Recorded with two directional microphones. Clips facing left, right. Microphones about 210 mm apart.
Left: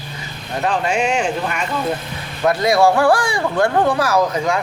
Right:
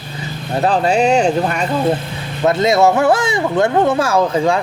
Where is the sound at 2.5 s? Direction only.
25° right (ahead or behind).